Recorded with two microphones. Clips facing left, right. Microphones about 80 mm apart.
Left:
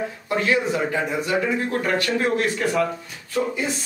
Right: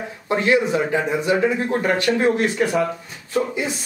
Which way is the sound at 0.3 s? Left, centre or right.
Right.